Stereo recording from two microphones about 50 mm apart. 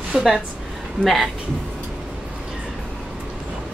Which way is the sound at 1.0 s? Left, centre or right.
Centre.